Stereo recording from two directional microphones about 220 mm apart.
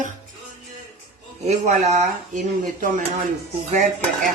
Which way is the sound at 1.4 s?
30° right (ahead or behind).